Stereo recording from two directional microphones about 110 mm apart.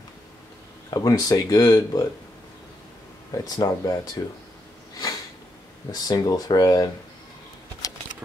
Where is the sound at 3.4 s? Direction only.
35° left (ahead or behind).